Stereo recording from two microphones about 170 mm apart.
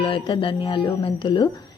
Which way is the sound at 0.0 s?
30° left (ahead or behind).